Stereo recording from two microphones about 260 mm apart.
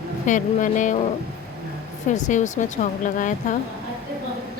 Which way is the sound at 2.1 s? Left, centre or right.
Left.